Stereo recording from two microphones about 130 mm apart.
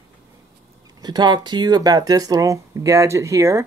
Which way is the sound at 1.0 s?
35° right (ahead or behind).